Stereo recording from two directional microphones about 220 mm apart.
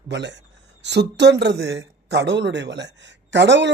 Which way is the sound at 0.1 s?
50° right (ahead or behind).